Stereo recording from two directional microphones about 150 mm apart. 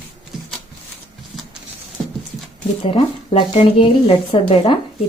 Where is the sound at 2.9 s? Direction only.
40° left (ahead or behind).